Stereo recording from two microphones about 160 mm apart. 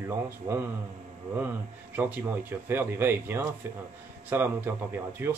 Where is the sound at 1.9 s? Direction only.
10° right (ahead or behind).